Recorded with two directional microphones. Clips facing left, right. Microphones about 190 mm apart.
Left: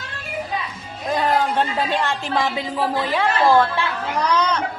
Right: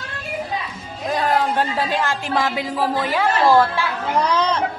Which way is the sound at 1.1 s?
Centre (ahead or behind).